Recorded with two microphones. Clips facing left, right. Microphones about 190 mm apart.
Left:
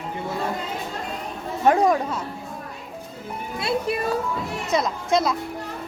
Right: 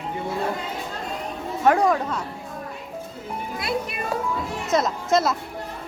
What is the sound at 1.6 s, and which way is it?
Speech, 20° left (ahead or behind).